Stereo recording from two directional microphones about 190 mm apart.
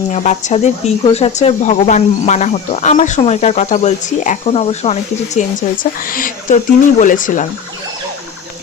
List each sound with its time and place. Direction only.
0.1 s speech: 40° left (ahead or behind)